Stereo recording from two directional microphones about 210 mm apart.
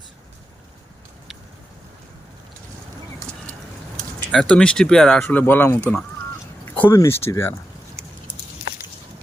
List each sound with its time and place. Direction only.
4.3 s speech: 5° left (ahead or behind)